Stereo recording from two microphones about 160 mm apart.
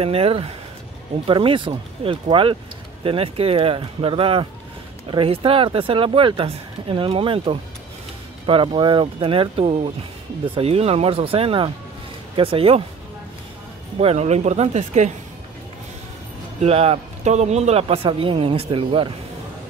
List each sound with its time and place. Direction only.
0.0 s speech: 40° right (ahead or behind)
13.9 s speech: 40° right (ahead or behind)
16.6 s speech: 40° right (ahead or behind)